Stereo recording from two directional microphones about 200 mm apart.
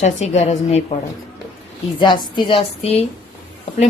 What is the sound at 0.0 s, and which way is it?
Speech, 35° left (ahead or behind).